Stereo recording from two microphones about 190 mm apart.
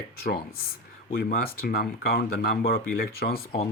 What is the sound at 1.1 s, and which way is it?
Speech, 55° left (ahead or behind).